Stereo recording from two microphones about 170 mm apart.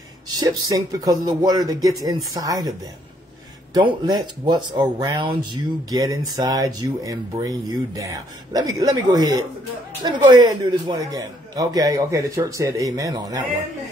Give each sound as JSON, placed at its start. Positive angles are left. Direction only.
{"t": 0.3, "sound": "speech", "side_deg": -20}
{"t": 3.7, "sound": "speech", "side_deg": -25}